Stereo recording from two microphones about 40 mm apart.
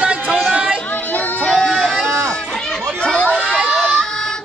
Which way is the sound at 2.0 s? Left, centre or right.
Right.